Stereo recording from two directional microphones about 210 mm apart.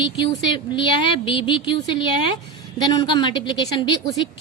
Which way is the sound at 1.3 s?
25° left (ahead or behind).